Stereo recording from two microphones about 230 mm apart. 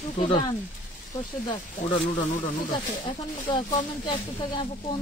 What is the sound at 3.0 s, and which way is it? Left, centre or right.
Speech, left.